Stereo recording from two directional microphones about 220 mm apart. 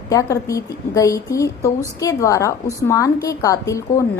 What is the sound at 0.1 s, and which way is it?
A woman's voice, 15° left (ahead or behind).